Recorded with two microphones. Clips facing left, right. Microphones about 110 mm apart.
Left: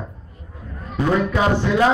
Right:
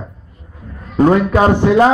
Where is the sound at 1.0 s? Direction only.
45° right (ahead or behind).